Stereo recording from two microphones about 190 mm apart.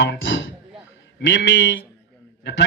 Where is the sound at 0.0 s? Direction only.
75° left (ahead or behind).